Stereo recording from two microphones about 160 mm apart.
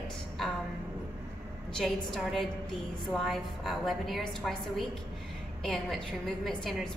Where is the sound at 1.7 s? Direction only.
Centre (ahead or behind).